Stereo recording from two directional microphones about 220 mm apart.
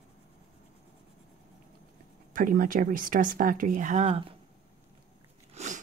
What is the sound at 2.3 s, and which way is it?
Speech, 40° right (ahead or behind).